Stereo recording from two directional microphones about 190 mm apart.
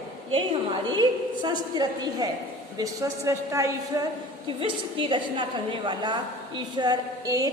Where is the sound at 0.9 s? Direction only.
20° right (ahead or behind).